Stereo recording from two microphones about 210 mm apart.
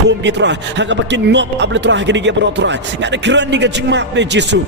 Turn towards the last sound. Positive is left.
turn(degrees=-55)  # may be behind; listen again after turning